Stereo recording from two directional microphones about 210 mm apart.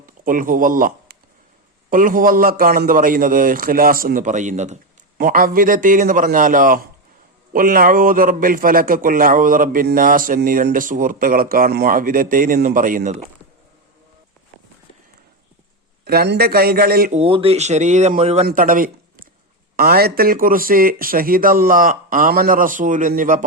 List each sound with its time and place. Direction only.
0.0 s a man's voice: 40° right (ahead or behind)
16.0 s speech: 50° right (ahead or behind)
17.2 s a man's voice: 25° right (ahead or behind)
18.4 s speech: 40° right (ahead or behind)